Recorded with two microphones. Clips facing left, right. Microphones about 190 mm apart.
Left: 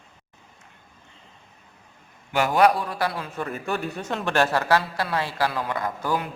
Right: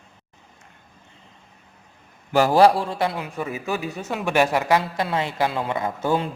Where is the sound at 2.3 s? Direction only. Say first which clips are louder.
Right 4 dB; 35° right (ahead or behind).